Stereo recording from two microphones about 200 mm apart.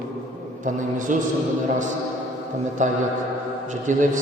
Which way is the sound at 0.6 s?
40° right (ahead or behind).